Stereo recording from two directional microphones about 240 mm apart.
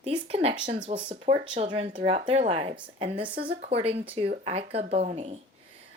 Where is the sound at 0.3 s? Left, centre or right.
Right.